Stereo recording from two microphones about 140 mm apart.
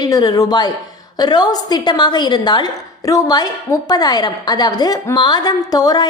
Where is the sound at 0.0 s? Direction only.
30° left (ahead or behind).